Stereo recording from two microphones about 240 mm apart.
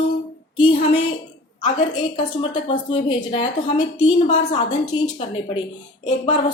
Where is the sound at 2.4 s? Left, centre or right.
Left.